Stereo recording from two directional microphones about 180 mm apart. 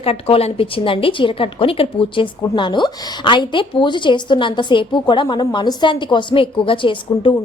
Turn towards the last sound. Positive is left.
turn(degrees=30)  # may be behind; listen again after turning